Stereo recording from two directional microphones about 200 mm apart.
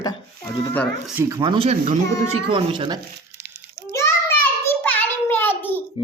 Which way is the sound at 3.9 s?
15° left (ahead or behind).